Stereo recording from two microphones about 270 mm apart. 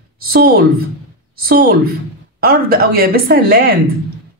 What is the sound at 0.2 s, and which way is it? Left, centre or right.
A woman's voice, right.